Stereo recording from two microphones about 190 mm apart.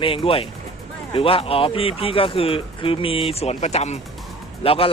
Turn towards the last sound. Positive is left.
turn(degrees=30)  # may be behind; listen again after turning